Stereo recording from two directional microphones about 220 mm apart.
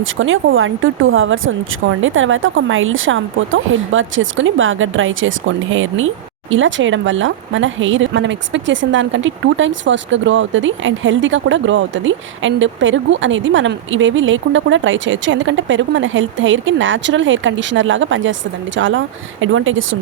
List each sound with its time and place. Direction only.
0.0 s speech: 60° right (ahead or behind)